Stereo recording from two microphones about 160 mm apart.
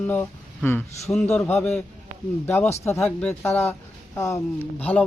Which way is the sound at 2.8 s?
15° left (ahead or behind).